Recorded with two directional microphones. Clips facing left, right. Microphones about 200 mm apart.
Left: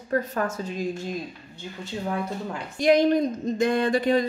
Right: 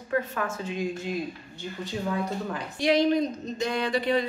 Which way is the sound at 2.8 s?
50° left (ahead or behind).